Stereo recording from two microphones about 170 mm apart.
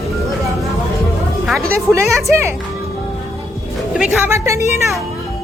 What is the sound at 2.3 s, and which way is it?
Speech, 15° right (ahead or behind).